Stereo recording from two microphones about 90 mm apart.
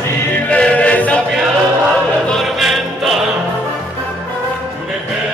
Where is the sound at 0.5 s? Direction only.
15° left (ahead or behind).